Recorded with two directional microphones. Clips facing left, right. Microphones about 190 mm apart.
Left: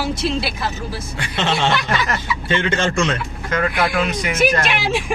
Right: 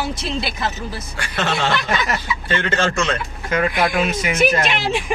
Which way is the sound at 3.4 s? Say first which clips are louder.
Right 1 dB; 10° right (ahead or behind).